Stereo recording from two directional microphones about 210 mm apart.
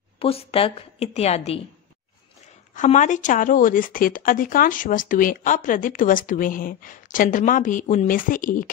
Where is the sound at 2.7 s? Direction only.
35° left (ahead or behind).